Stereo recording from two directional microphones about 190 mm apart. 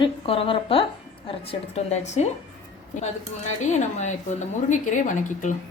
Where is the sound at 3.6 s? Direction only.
40° left (ahead or behind).